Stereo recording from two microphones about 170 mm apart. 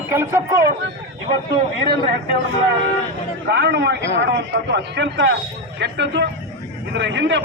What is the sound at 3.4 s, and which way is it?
A man's voice, 80° right.